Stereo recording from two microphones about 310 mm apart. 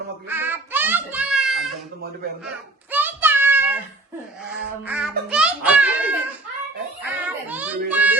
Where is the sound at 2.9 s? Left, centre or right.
Centre.